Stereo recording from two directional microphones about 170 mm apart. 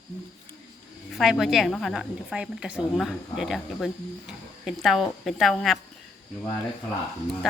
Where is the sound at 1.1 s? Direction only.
Centre (ahead or behind).